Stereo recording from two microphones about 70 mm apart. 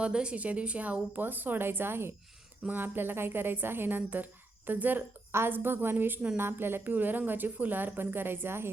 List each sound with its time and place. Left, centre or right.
0.0 s a woman's voice: centre; by 8.7 s right